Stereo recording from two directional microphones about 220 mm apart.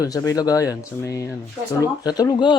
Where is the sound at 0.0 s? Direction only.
15° left (ahead or behind).